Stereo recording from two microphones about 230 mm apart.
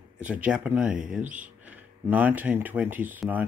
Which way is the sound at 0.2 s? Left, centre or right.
Centre.